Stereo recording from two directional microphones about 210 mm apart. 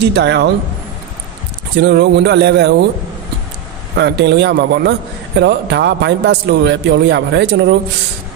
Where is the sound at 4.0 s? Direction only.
55° right (ahead or behind).